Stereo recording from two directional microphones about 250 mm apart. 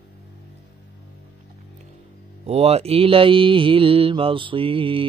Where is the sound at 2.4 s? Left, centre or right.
Right.